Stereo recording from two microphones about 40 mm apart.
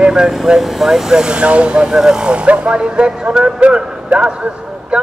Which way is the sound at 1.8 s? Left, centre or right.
Centre.